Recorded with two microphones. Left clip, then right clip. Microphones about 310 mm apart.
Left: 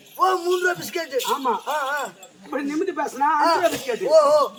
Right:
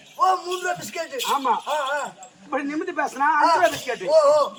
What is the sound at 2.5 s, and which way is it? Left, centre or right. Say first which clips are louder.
Speech: left 1 dB; centre.